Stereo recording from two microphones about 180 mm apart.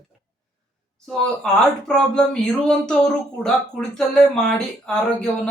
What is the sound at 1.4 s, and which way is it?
Speech, 5° left (ahead or behind).